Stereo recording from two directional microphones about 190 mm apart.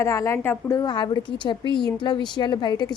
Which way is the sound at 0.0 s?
15° left (ahead or behind).